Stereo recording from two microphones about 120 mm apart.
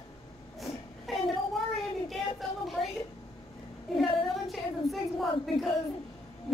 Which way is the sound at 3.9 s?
Centre (ahead or behind).